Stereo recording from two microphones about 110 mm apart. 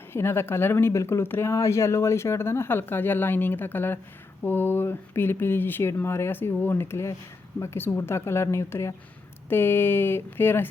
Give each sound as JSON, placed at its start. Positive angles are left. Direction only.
{"t": 0.1, "sound": "speech", "side_deg": 20}